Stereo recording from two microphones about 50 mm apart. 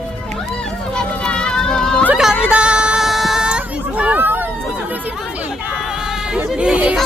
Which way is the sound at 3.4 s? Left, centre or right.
Right.